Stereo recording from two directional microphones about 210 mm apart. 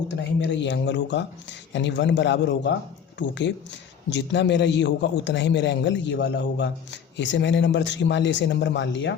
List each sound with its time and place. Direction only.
0.4 s a man's voice: 60° left (ahead or behind)